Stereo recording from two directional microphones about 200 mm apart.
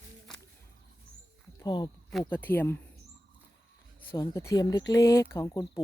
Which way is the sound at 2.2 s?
10° left (ahead or behind).